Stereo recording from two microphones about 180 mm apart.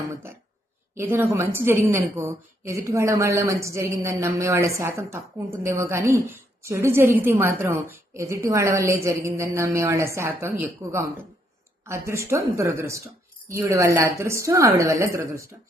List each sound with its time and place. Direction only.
0.9 s a woman's voice: 10° right (ahead or behind)
11.9 s a woman's voice: 15° right (ahead or behind)